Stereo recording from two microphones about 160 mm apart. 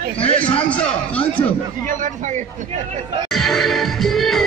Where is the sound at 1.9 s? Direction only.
50° right (ahead or behind).